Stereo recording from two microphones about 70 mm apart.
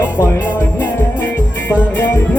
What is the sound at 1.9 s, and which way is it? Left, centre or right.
Music, left.